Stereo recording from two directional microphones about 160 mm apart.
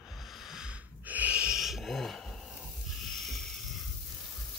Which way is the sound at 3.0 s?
Centre (ahead or behind).